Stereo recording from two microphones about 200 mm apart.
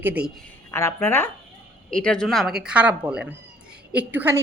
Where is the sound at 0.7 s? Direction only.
15° left (ahead or behind).